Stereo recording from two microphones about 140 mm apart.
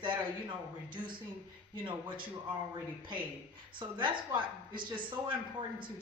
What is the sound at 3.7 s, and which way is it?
Speech, 35° right (ahead or behind).